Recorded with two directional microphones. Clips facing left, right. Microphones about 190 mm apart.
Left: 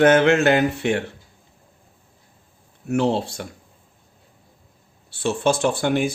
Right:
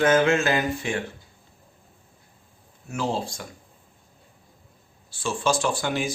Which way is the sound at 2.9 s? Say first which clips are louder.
Left 7 dB; 65° left (ahead or behind).